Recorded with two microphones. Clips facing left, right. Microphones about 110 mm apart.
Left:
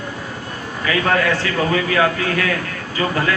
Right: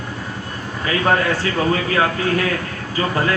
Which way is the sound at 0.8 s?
30° right (ahead or behind).